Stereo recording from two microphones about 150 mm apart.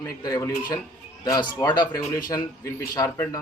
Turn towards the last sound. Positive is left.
turn(degrees=20)  # may be behind; listen again after turning